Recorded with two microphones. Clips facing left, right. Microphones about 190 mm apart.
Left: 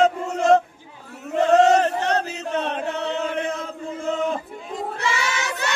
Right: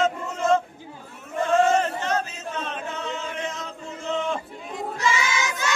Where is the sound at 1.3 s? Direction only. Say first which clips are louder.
Left 5 dB; 70° left (ahead or behind).